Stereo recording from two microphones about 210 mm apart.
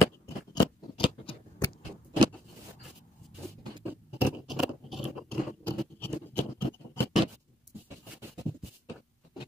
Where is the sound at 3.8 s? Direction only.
10° right (ahead or behind).